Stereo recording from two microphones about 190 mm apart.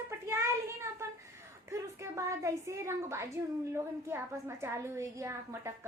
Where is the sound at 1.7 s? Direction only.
15° right (ahead or behind).